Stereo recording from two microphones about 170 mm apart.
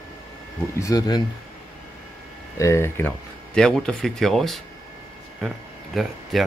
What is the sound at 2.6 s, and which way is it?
Speech, 15° left (ahead or behind).